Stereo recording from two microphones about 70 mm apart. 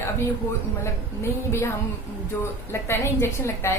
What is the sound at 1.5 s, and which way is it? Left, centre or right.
Speech, left.